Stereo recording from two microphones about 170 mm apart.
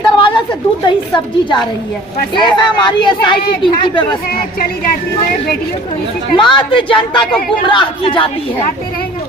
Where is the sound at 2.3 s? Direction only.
25° left (ahead or behind).